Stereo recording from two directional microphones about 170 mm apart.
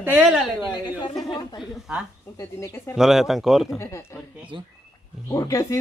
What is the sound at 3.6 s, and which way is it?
Speech, 15° left (ahead or behind).